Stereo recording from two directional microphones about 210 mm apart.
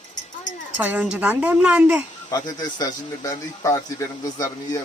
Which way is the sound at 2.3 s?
20° left (ahead or behind).